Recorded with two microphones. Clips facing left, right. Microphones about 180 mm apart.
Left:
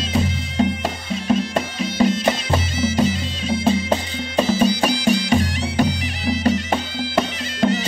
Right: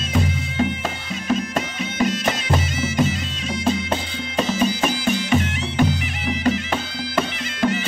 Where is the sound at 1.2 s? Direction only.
30° left (ahead or behind).